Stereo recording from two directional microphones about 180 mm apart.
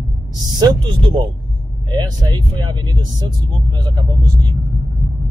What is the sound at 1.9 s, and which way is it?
Speech, 25° right (ahead or behind).